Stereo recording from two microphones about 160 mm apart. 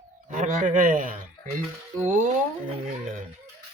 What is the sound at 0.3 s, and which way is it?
Speech, 55° right (ahead or behind).